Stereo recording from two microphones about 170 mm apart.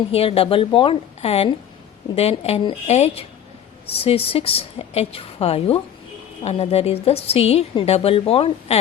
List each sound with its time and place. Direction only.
0.1 s a woman's voice: 35° left (ahead or behind)